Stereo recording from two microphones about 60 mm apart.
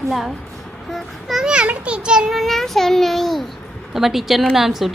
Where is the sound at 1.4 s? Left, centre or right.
Centre.